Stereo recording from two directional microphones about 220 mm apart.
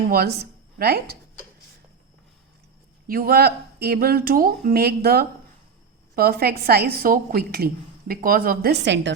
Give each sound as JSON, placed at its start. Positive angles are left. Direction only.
{"t": 0.1, "sound": "a woman's voice", "side_deg": -45}
{"t": 3.1, "sound": "a woman's voice", "side_deg": -40}